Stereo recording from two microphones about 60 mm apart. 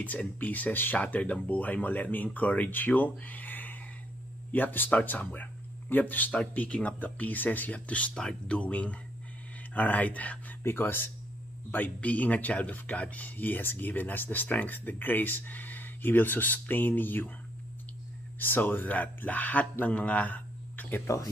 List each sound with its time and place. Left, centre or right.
0.0 s speech: left
8.1 s speech: centre
10.6 s speech: left
11.7 s speech: left
18.4 s speech: left
21.1 s speech: left